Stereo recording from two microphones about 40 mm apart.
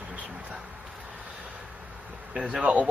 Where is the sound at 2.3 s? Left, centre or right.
Right.